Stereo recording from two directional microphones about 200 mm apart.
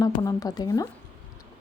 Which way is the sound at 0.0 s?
20° left (ahead or behind).